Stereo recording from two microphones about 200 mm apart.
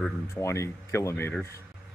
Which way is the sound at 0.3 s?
15° left (ahead or behind).